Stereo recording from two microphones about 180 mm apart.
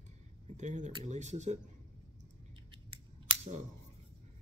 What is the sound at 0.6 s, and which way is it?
Speech, 40° right (ahead or behind).